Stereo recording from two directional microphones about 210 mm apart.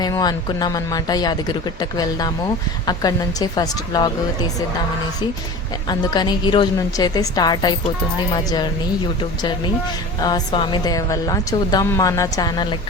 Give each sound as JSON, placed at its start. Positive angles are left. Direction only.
{"t": 0.0, "sound": "a woman's voice", "side_deg": 20}
{"t": 5.9, "sound": "a woman's voice", "side_deg": 20}
{"t": 10.2, "sound": "a woman's voice", "side_deg": 20}